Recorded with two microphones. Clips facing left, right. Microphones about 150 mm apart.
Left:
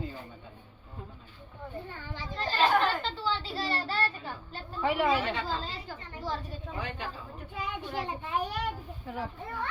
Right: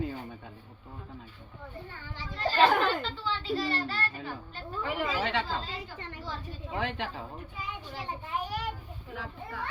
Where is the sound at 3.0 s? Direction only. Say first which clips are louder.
Left 1 dB; 35° left (ahead or behind).